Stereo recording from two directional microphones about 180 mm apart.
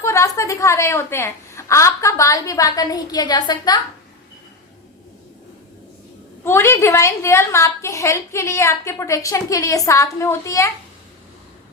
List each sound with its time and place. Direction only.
0.0 s a woman's voice: 15° left (ahead or behind)
6.4 s a woman's voice: 15° left (ahead or behind)